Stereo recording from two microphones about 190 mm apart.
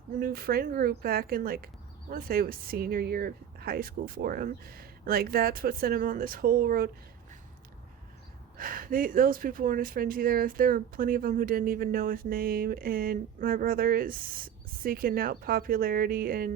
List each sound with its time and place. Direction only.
0.2 s speech: 50° right (ahead or behind)
8.5 s speech: 50° right (ahead or behind)